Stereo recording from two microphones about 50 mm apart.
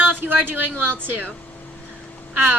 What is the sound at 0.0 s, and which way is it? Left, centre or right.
Speech, right.